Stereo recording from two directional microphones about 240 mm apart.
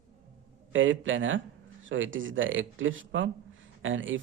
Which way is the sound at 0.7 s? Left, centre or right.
Right.